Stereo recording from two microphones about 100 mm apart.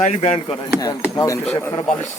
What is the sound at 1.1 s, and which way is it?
Speech, 30° left (ahead or behind).